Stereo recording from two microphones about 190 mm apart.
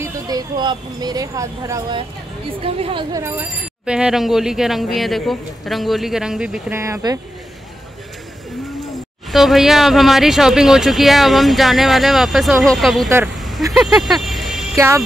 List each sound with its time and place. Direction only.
0.0 s speech: 20° right (ahead or behind); by 6.6 s 5° right (ahead or behind)
6.7 s speech: 15° right (ahead or behind)
9.3 s speech: centre (ahead or behind)
13.7 s a sound: centre (ahead or behind)
14.8 s speech: 15° right (ahead or behind)